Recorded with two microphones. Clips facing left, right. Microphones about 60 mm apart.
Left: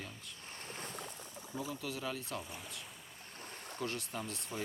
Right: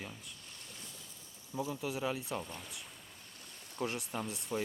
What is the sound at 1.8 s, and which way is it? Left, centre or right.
Speech, centre.